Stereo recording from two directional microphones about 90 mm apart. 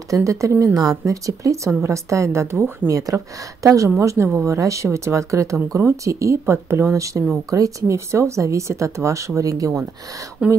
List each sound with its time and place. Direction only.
0.1 s speech: 35° right (ahead or behind)
2.9 s speech: 40° right (ahead or behind)
10.4 s speech: 15° right (ahead or behind)